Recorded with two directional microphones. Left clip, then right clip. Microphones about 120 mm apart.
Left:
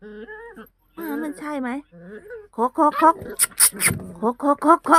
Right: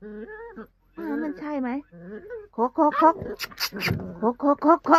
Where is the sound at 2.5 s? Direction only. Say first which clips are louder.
Left 2 dB; 15° left (ahead or behind).